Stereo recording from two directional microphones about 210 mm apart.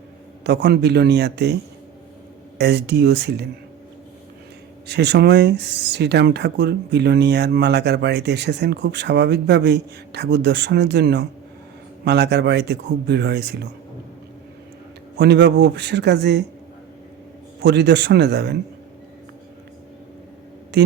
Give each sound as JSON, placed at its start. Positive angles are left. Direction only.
{"t": 0.4, "sound": "speech", "side_deg": -55}
{"t": 2.6, "sound": "speech", "side_deg": -55}
{"t": 4.9, "sound": "speech", "side_deg": -55}
{"t": 15.2, "sound": "speech", "side_deg": -55}
{"t": 17.6, "sound": "speech", "side_deg": -55}
{"t": 20.7, "sound": "speech", "side_deg": -55}